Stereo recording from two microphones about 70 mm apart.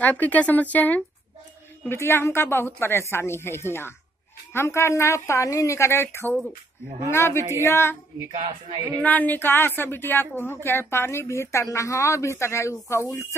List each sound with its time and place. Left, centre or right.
0.0 s speech: left
1.9 s a woman's voice: left
9.0 s a woman's voice: left